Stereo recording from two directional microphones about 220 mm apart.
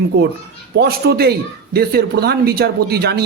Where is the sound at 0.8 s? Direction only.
45° right (ahead or behind).